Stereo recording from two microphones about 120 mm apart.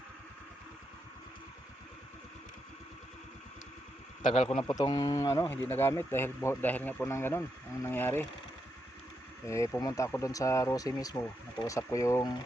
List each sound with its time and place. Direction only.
4.3 s speech: 55° left (ahead or behind)
4.6 s speech: 30° left (ahead or behind)
9.5 s speech: 25° left (ahead or behind)